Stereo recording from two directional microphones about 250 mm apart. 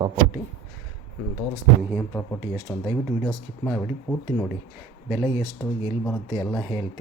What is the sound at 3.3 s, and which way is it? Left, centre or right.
Speech, centre.